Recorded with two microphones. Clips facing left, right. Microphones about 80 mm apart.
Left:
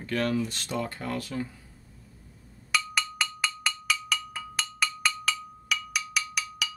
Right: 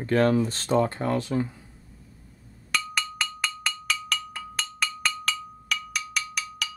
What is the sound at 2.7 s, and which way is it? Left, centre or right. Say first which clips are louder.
Percussion: even; centre.